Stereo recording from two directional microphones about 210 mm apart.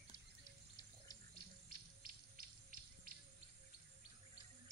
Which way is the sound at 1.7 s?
45° right (ahead or behind).